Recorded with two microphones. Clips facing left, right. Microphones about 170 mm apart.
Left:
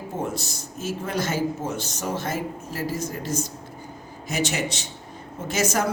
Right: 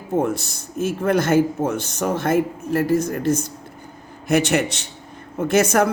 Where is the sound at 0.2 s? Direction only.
55° right (ahead or behind).